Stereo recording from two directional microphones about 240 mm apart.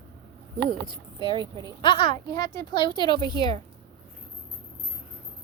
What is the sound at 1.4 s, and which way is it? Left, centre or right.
Speech, centre.